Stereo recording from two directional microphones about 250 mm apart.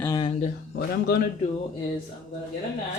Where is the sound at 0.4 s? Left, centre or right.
Left.